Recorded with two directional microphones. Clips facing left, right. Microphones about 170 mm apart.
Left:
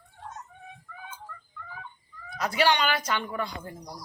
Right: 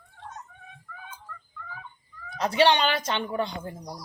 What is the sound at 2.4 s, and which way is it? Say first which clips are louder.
A woman's voice: right 3 dB; 30° right (ahead or behind).